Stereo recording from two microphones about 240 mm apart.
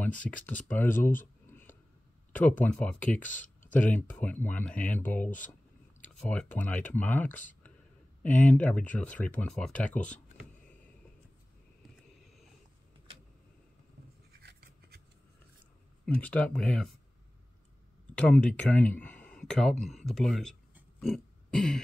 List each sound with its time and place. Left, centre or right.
0.0 s speech: centre
2.3 s speech: centre
14.4 s a sound: right
16.1 s speech: centre
18.1 s speech: centre